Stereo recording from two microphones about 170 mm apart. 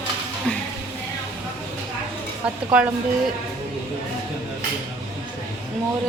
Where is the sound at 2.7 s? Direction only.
5° right (ahead or behind).